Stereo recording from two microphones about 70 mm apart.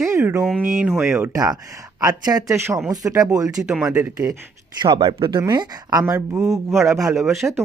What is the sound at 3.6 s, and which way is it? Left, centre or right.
Speech, centre.